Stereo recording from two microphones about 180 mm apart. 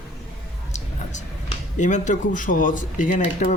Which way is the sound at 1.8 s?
40° left (ahead or behind).